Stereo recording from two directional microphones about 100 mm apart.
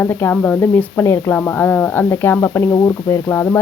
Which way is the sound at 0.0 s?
20° left (ahead or behind).